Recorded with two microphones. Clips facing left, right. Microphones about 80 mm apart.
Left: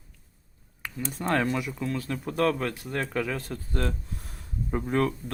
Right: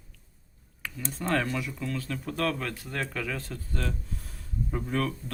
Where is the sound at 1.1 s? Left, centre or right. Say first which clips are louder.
Left 2 dB; left.